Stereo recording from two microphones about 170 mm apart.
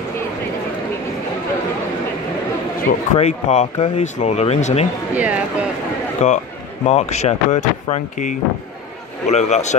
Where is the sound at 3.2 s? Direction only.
40° left (ahead or behind).